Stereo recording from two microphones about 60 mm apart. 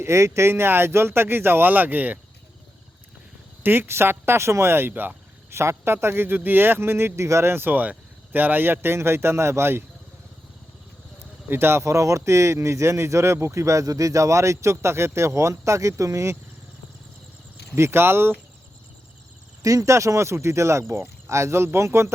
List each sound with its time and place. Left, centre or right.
0.0 s speech: right
3.6 s speech: right
5.5 s speech: right
7.5 s speech: right
11.4 s speech: right
11.8 s speech: right
17.7 s speech: right
19.6 s speech: right